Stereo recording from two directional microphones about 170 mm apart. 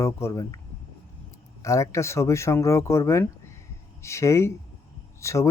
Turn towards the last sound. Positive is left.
turn(degrees=15)  # may be behind; listen again after turning